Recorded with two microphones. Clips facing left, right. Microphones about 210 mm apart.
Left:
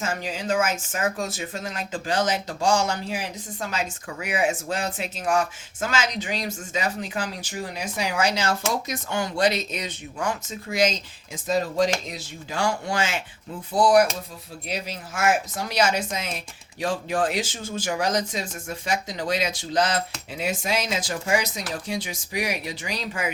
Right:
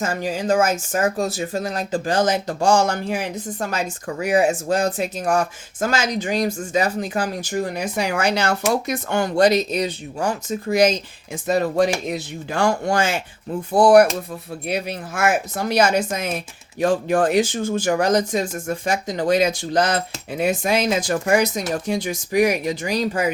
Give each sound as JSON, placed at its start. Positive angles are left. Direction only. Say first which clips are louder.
{"t": 0.0, "sound": "speech", "louder": "right 6 dB", "side_deg": -45}
{"t": 11.4, "sound": "speech", "louder": "right 4 dB", "side_deg": -60}
{"t": 13.7, "sound": "speech", "louder": "right 6 dB", "side_deg": -55}
{"t": 21.7, "sound": "speech", "louder": "right 7 dB", "side_deg": -50}